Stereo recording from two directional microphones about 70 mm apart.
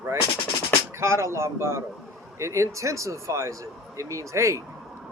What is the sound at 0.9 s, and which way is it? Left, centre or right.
A man's voice, right.